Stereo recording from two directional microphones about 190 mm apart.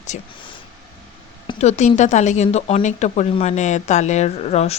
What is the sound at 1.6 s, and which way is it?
Speech, 35° left (ahead or behind).